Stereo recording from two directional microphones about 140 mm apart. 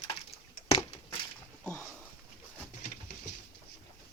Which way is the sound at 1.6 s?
10° left (ahead or behind).